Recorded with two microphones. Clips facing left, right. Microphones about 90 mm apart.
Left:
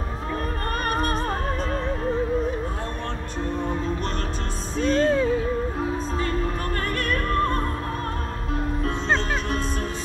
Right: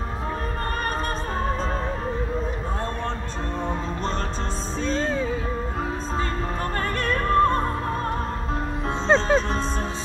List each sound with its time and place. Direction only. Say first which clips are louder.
4.7 s music: left 5 dB; 60° left (ahead or behind)
7.0 s music: right 5 dB; 20° right (ahead or behind)
8.8 s music: right 6 dB; 20° right (ahead or behind)